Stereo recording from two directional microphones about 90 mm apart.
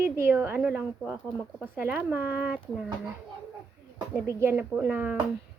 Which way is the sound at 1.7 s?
20° right (ahead or behind).